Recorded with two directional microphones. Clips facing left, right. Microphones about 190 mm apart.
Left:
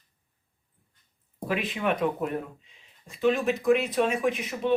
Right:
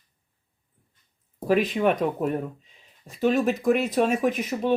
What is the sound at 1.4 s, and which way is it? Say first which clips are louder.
Speech: right 7 dB; 40° right (ahead or behind).